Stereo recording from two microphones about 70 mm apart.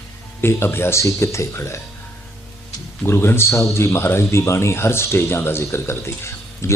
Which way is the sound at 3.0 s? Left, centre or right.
Left.